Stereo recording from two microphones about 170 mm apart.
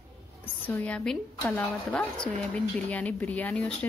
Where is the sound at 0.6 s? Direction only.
10° left (ahead or behind).